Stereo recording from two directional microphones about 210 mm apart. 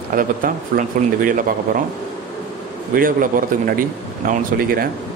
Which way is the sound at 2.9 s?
40° right (ahead or behind).